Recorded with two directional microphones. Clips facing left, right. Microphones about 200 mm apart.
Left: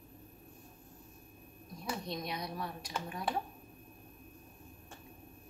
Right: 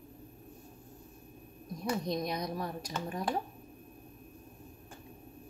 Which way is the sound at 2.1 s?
40° right (ahead or behind).